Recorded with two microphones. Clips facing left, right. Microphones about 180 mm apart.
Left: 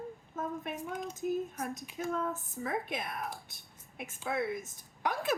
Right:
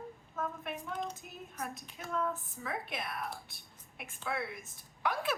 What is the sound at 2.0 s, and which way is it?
A woman's voice, 45° left (ahead or behind).